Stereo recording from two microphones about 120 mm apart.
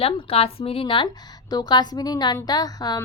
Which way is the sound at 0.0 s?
55° left (ahead or behind).